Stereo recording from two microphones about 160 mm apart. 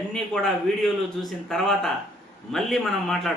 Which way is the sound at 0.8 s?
Centre (ahead or behind).